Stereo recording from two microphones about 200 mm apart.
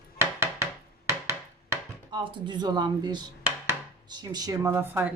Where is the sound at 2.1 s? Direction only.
20° right (ahead or behind).